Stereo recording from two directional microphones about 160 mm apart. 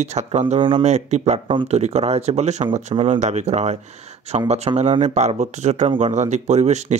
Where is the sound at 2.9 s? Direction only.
35° right (ahead or behind).